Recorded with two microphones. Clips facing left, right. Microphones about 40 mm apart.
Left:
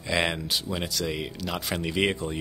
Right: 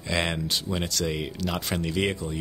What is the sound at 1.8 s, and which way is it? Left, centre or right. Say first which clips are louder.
Speech: left 2 dB; centre.